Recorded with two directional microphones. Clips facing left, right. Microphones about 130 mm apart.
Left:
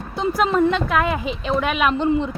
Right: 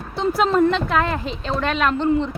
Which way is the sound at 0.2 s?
5° left (ahead or behind).